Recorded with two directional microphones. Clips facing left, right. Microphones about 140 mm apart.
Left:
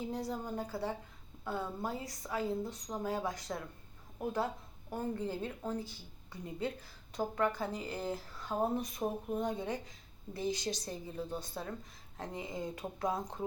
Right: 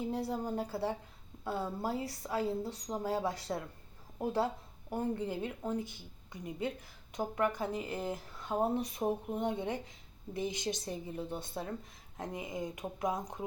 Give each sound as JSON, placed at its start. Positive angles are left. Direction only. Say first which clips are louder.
{"t": 0.1, "sound": "speech", "louder": "right 3 dB", "side_deg": -30}